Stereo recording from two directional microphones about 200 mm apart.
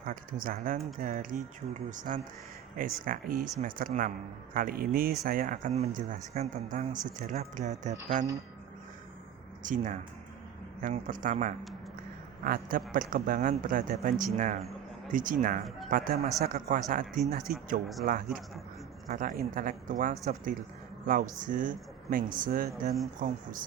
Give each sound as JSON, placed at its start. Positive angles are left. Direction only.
{"t": 0.0, "sound": "speech", "side_deg": -45}
{"t": 9.6, "sound": "speech", "side_deg": -40}